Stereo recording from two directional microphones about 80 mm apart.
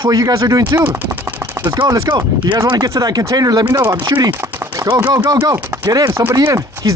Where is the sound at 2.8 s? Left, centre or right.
Right.